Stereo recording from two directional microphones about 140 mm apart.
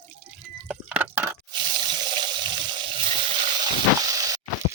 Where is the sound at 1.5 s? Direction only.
30° right (ahead or behind).